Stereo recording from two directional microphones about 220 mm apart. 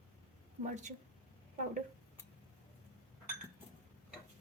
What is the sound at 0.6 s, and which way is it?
Speech, 35° right (ahead or behind).